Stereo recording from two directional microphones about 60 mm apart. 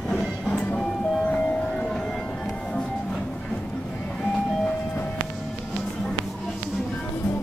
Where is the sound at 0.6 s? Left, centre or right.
Left.